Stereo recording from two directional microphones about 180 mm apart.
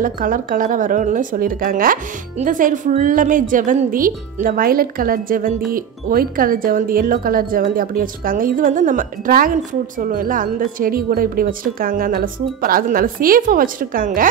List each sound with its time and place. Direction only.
0.0 s speech: 50° right (ahead or behind)